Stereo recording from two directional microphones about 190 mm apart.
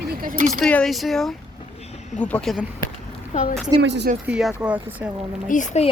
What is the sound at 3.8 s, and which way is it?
Speech, 65° right (ahead or behind).